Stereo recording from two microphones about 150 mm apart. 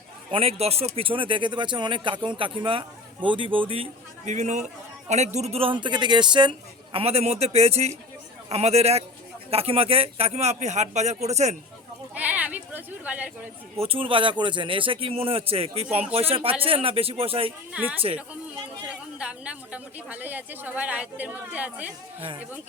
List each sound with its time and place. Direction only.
0.3 s speech: 40° right (ahead or behind)
4.3 s speech: 50° right (ahead or behind); by 6.5 s 30° right (ahead or behind)
6.9 s speech: 40° right (ahead or behind)
12.1 s a sound: 10° right (ahead or behind)
13.7 s speech: 40° right (ahead or behind)
17.7 s a woman's voice: 10° right (ahead or behind)